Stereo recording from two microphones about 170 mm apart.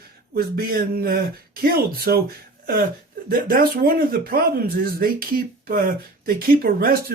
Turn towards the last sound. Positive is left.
turn(degrees=-65)  # may be behind; listen again after turning